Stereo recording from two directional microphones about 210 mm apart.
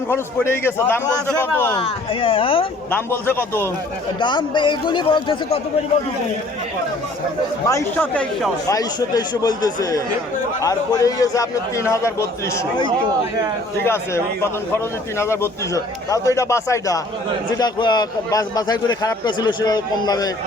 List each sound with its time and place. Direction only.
0.1 s a man's voice: 10° left (ahead or behind)
1.8 s a man's voice: 25° left (ahead or behind)
2.9 s a man's voice: 10° left (ahead or behind)
4.2 s a man's voice: 20° left (ahead or behind)
7.7 s a man's voice: 10° left (ahead or behind)
8.6 s a man's voice: 20° left (ahead or behind)
15.2 s a man's voice: 10° left (ahead or behind)